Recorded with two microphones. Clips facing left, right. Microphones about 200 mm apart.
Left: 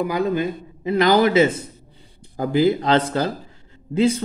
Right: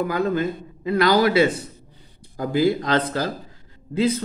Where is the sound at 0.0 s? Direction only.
15° left (ahead or behind).